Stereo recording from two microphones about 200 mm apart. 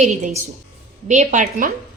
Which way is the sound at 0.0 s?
35° right (ahead or behind).